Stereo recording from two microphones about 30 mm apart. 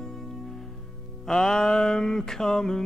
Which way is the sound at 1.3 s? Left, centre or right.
Centre.